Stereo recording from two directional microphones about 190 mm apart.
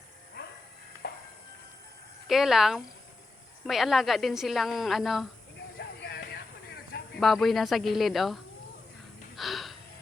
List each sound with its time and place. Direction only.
0.4 s a sound: 55° left (ahead or behind)
1.0 s music: 55° left (ahead or behind)
2.2 s a woman's voice: centre (ahead or behind)
5.5 s a sound: 60° left (ahead or behind)
7.2 s a woman's voice: centre (ahead or behind)
9.3 s gasp: centre (ahead or behind)